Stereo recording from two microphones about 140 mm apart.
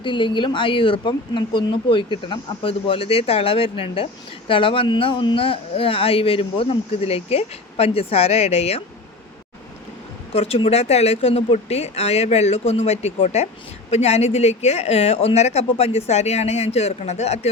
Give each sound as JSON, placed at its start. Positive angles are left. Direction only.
{"t": 0.0, "sound": "speech", "side_deg": 35}
{"t": 10.3, "sound": "speech", "side_deg": 45}